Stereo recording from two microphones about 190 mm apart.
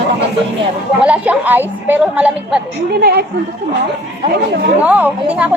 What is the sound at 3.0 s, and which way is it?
Speech, 55° right (ahead or behind).